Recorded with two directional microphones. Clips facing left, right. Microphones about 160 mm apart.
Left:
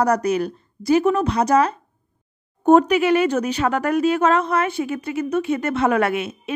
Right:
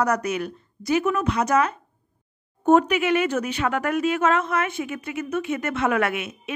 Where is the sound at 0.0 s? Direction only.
35° left (ahead or behind).